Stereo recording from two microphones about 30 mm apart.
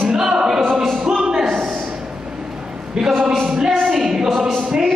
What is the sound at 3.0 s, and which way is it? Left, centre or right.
Speech, right.